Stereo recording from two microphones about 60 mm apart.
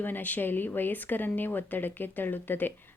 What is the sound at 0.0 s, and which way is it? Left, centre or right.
Speech, left.